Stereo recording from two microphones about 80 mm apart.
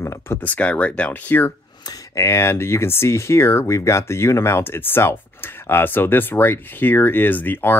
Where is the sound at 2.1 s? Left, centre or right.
Left.